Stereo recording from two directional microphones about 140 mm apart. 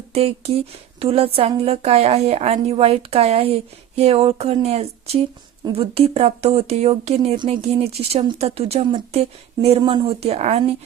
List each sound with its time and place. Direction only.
0.1 s speech: 45° right (ahead or behind)
7.3 s speech: 35° right (ahead or behind)
7.6 s speech: 45° right (ahead or behind)